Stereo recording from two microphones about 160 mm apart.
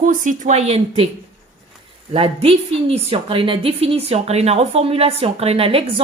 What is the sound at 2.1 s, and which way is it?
A woman's voice, 35° right (ahead or behind).